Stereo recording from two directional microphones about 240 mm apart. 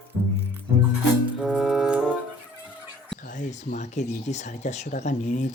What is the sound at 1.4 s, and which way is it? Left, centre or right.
Music, centre.